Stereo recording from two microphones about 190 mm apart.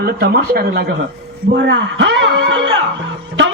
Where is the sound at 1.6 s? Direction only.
65° right (ahead or behind).